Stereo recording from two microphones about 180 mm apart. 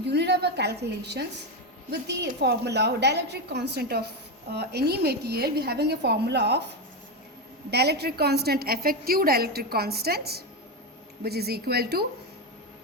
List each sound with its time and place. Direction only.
0.0 s a woman's voice: 70° right (ahead or behind)